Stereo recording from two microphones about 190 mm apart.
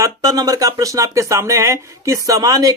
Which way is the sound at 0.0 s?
20° right (ahead or behind).